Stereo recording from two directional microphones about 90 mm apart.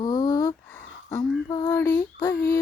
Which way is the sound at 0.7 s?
25° left (ahead or behind).